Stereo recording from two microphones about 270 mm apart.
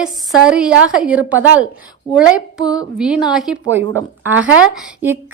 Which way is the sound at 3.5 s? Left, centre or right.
Right.